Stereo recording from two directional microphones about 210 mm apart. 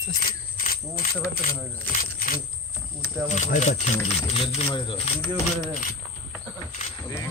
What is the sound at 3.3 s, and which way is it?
Speech, 35° left (ahead or behind).